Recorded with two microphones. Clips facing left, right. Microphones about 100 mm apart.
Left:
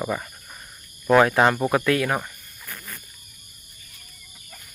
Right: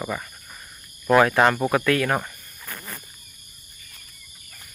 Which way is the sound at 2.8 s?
35° right (ahead or behind).